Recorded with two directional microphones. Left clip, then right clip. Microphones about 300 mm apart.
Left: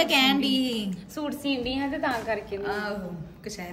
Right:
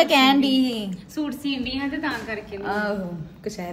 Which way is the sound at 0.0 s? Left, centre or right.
Centre.